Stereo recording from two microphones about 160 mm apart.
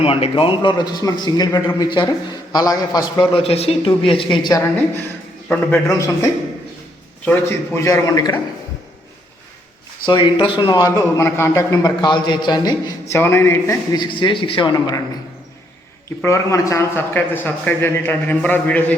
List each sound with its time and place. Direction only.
0.0 s a man's voice: 35° left (ahead or behind)
5.9 s a man's voice: 20° left (ahead or behind)
10.1 s speech: 30° left (ahead or behind)
13.1 s a man's voice: 15° left (ahead or behind)
14.0 s speech: 30° left (ahead or behind)
16.2 s a man's voice: 20° left (ahead or behind)